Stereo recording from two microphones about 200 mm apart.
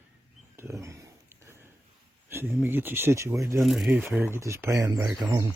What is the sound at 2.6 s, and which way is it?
Speech, 10° right (ahead or behind).